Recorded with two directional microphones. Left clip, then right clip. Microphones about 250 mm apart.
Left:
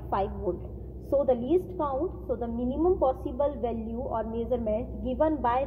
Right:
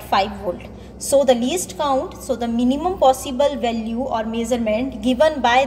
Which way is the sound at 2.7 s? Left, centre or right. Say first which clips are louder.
Right 9 dB; centre.